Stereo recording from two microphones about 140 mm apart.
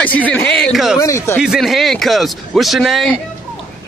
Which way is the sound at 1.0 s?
20° left (ahead or behind).